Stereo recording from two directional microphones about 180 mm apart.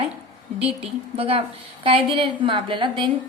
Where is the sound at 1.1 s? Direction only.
30° right (ahead or behind).